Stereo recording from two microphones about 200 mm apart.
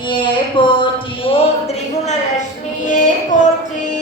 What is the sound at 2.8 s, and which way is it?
Music, 40° left (ahead or behind).